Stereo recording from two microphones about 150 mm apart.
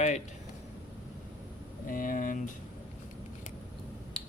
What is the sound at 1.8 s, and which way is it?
Speech, 70° left (ahead or behind).